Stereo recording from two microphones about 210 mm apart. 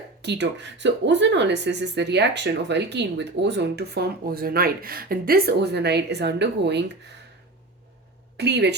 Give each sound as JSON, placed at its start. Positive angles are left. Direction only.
{"t": 0.2, "sound": "speech", "side_deg": -55}
{"t": 8.4, "sound": "speech", "side_deg": -55}